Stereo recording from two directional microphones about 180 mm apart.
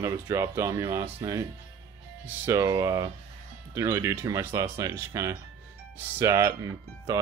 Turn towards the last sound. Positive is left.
turn(degrees=-20)  # may be behind; listen again after turning